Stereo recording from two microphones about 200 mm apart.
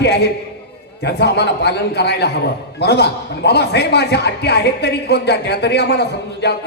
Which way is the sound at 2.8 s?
55° left (ahead or behind).